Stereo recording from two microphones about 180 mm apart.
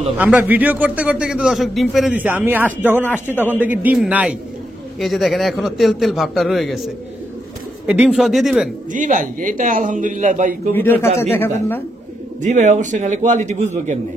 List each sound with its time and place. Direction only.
0.2 s a man's voice: 10° right (ahead or behind)
3.0 s speech: 10° left (ahead or behind)
3.3 s a man's voice: 10° right (ahead or behind)
7.8 s a man's voice: 5° right (ahead or behind)
8.9 s a man's voice: 45° right (ahead or behind)
10.7 s speech: 10° left (ahead or behind)
12.4 s a man's voice: 40° right (ahead or behind)